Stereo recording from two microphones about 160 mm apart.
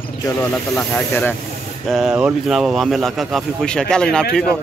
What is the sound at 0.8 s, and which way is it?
Speech, 10° left (ahead or behind).